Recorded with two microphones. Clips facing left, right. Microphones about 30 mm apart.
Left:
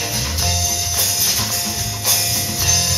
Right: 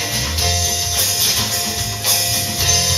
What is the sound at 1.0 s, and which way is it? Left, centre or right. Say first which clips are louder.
Music: right 2 dB; right.